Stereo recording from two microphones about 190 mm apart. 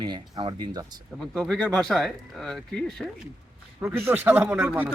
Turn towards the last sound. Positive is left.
turn(degrees=-10)  # may be behind; listen again after turning